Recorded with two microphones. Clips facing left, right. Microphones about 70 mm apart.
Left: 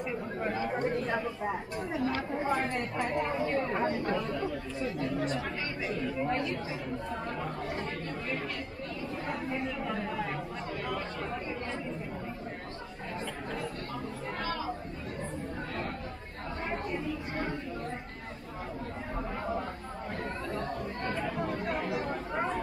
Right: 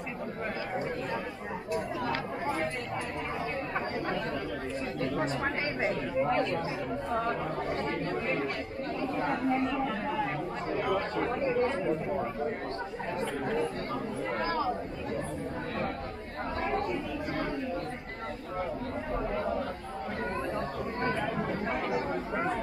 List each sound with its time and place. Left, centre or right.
5.0 s speech: right
5.9 s speech: centre
9.2 s speech: right
14.4 s chatter: right
21.0 s chatter: right